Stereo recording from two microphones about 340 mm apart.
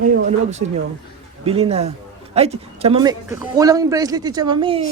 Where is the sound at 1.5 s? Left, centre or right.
Centre.